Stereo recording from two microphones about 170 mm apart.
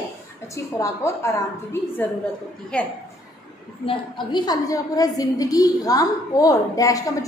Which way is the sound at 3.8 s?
25° left (ahead or behind).